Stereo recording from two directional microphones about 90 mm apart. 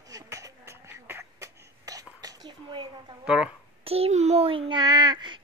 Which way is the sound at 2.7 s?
60° right (ahead or behind).